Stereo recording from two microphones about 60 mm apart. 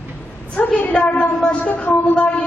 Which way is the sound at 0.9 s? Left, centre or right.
Left.